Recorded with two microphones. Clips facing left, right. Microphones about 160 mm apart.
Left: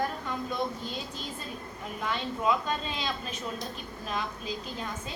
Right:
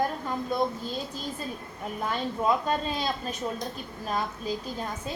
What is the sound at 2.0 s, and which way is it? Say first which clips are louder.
A woman's voice: right 2 dB; 40° right (ahead or behind).